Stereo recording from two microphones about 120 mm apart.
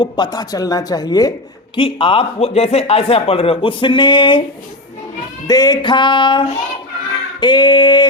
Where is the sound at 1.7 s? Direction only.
50° left (ahead or behind).